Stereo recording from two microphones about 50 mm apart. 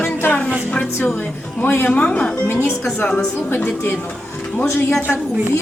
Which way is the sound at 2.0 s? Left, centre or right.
Left.